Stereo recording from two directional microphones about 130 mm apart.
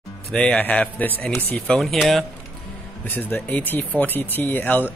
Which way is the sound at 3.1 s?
15° left (ahead or behind).